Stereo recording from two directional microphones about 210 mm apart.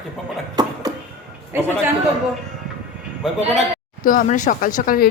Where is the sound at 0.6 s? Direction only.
20° right (ahead or behind).